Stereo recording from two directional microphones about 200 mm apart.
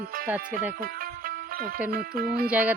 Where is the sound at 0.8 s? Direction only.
45° right (ahead or behind).